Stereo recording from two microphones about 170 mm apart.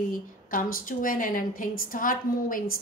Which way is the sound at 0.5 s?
55° left (ahead or behind).